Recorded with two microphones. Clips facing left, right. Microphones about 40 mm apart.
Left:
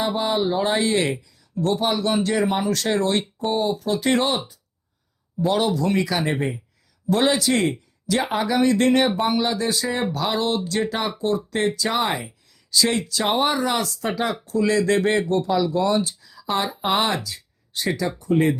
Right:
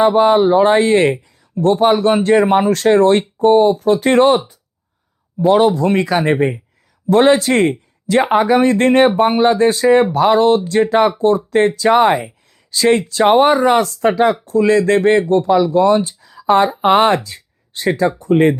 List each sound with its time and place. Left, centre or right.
0.2 s speech: right
5.4 s speech: right